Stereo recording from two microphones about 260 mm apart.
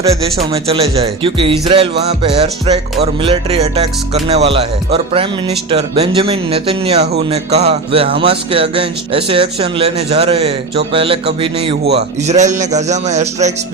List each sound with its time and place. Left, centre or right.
0.0 s speech: right